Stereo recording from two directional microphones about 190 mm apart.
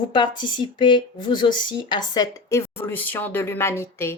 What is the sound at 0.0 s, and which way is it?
Speech, 25° left (ahead or behind).